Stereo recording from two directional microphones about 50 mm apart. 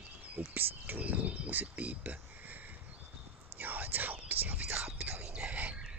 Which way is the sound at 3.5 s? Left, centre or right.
Right.